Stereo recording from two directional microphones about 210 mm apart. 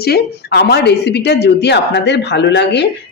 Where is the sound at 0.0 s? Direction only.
50° left (ahead or behind).